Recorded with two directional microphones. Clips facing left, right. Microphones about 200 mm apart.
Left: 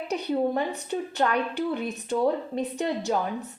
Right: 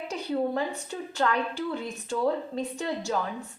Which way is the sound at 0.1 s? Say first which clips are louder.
Left 3 dB; 20° left (ahead or behind).